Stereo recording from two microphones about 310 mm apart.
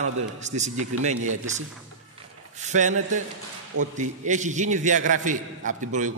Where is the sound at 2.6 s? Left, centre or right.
Right.